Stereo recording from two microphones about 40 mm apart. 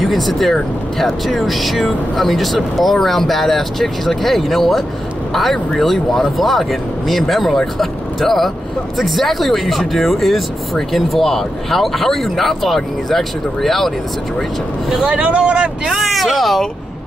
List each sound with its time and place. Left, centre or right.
0.0 s speech: centre
15.0 s speech: right
15.9 s speech: centre